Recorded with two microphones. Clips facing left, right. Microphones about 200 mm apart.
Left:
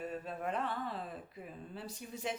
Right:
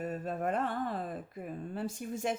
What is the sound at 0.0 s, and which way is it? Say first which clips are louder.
Speech: right 5 dB; 45° right (ahead or behind).